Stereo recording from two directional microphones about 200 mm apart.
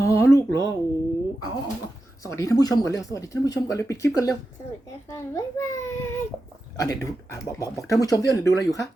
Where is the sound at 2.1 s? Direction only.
15° left (ahead or behind).